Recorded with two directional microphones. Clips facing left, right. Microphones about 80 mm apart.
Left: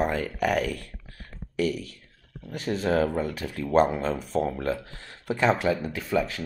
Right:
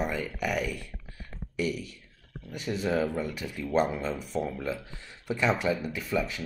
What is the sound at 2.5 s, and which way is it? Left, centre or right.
Speech, left.